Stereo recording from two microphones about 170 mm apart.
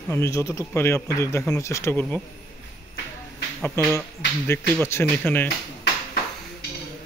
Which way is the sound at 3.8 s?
15° left (ahead or behind).